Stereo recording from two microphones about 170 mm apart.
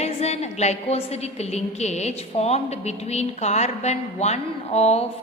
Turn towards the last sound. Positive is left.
turn(degrees=40)  # may be behind; listen again after turning